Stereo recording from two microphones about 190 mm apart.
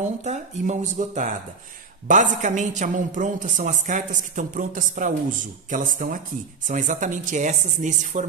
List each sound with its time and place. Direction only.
0.0 s a woman's voice: 40° right (ahead or behind)